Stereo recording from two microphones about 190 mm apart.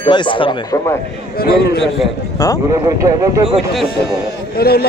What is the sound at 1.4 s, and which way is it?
Speech, 55° left (ahead or behind).